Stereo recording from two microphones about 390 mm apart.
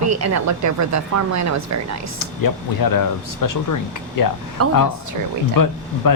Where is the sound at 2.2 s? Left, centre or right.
Left.